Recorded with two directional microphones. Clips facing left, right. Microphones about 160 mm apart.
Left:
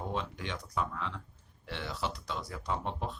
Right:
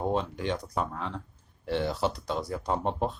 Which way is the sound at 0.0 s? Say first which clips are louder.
Right 8 dB; 40° right (ahead or behind).